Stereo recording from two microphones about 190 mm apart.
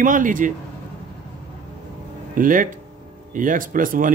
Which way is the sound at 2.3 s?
45° right (ahead or behind).